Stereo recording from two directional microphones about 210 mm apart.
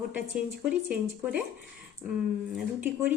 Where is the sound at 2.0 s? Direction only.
15° right (ahead or behind).